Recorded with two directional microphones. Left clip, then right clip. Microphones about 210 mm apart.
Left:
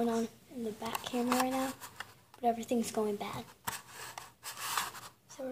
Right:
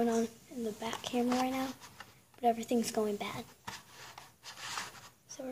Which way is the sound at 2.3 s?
10° right (ahead or behind).